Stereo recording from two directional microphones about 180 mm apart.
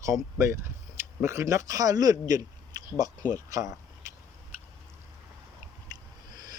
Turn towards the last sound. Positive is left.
turn(degrees=-20)  # may be behind; listen again after turning